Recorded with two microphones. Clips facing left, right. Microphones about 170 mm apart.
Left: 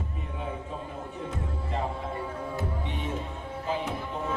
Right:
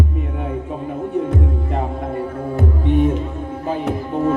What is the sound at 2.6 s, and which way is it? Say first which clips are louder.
Music: right 16 dB; 55° right (ahead or behind).